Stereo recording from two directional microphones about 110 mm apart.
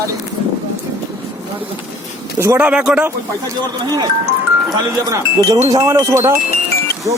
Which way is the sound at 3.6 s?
40° right (ahead or behind).